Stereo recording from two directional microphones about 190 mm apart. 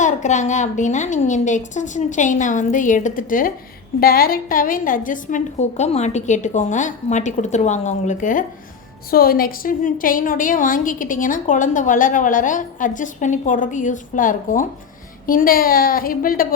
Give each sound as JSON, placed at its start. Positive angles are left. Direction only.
{"t": 0.0, "sound": "a woman's voice", "side_deg": 40}